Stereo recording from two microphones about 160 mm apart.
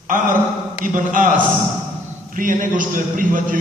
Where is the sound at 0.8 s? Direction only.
55° right (ahead or behind).